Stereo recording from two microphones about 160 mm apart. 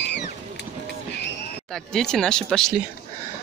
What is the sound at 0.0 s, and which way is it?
Vehicle, 90° left.